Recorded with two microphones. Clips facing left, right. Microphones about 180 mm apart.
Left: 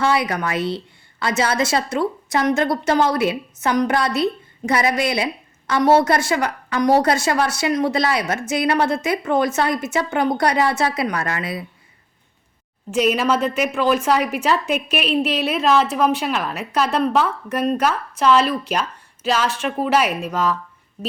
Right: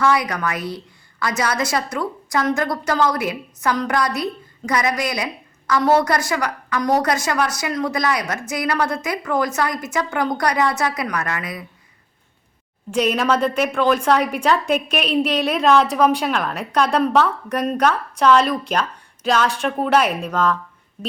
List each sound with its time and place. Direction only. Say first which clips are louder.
0.0 s a woman's voice: even; 25° left (ahead or behind)
12.9 s a woman's voice: left 1 dB; 5° left (ahead or behind)